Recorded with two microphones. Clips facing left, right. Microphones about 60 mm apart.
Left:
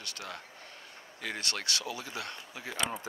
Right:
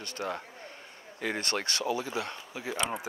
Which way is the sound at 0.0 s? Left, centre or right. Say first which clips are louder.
Right 7 dB; right.